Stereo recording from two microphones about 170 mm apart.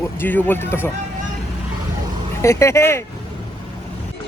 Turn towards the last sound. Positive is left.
turn(degrees=15)  # may be behind; listen again after turning